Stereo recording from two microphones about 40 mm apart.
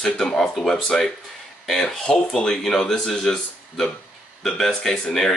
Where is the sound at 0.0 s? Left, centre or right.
Centre.